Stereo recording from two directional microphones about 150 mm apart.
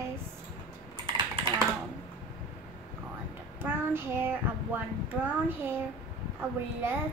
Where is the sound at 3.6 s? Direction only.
15° right (ahead or behind).